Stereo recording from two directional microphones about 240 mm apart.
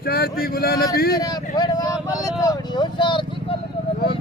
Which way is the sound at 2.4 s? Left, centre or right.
Centre.